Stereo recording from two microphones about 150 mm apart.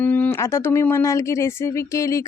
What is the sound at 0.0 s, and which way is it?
Speech, 10° left (ahead or behind).